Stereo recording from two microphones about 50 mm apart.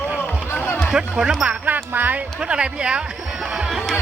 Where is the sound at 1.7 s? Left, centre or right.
Right.